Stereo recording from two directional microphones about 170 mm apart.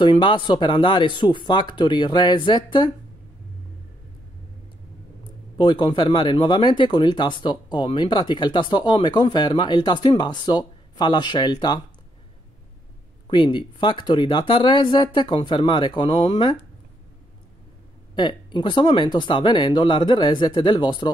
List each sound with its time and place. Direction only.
0.0 s speech: 25° left (ahead or behind)
5.6 s speech: 30° left (ahead or behind)
13.3 s speech: 30° left (ahead or behind)
18.1 s speech: 25° left (ahead or behind)